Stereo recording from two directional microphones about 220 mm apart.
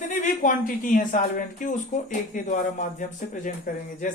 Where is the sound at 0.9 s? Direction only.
35° left (ahead or behind).